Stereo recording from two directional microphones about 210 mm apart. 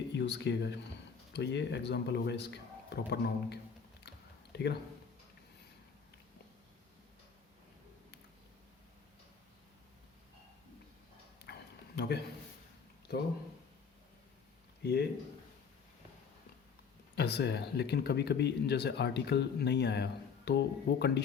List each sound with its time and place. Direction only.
0.2 s speech: 55° left (ahead or behind)
11.9 s speech: 50° left (ahead or behind)
14.8 s speech: 50° left (ahead or behind)
17.2 s speech: 55° left (ahead or behind)